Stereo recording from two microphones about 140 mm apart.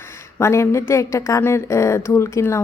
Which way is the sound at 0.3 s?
20° left (ahead or behind).